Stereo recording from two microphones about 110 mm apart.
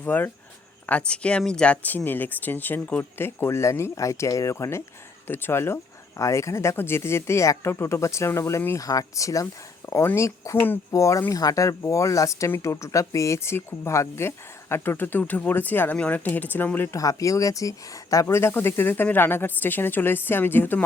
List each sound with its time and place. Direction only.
0.0 s speech: 15° left (ahead or behind)
17.0 s speech: 30° left (ahead or behind)